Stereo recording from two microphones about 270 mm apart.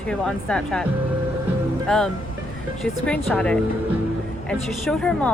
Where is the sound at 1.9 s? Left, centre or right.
Centre.